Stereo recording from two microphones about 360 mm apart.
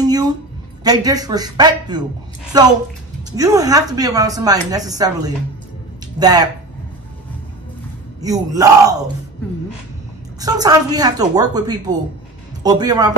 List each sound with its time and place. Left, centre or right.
0.0 s a sound: centre
0.8 s a woman's voice: centre
8.2 s a woman's voice: centre
10.4 s a woman's voice: centre